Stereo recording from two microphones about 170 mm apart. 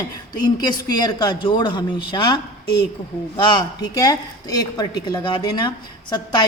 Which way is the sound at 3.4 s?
25° left (ahead or behind).